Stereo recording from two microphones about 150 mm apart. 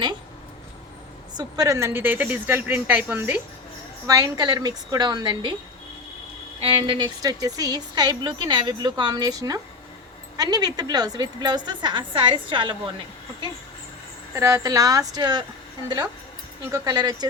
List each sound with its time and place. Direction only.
1.3 s a woman's voice: 25° right (ahead or behind); by 3.4 s 10° right (ahead or behind)
4.0 s a woman's voice: 20° right (ahead or behind)
6.6 s a woman's voice: 35° right (ahead or behind)
14.3 s a woman's voice: 20° right (ahead or behind)
16.6 s a woman's voice: 25° right (ahead or behind)